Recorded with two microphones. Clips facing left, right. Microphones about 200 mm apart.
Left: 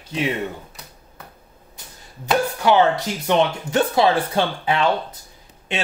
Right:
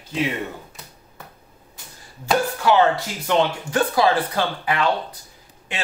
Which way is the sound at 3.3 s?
25° left (ahead or behind).